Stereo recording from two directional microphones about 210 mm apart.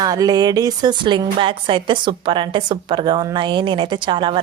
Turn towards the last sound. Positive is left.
turn(degrees=-20)  # may be behind; listen again after turning